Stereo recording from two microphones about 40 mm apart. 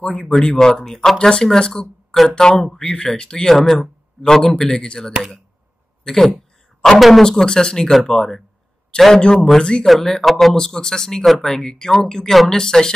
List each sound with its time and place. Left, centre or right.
0.0 s speech: centre
2.5 s speech: centre
3.4 s speech: centre
7.2 s speech: centre
9.8 s speech: centre
11.5 s speech: centre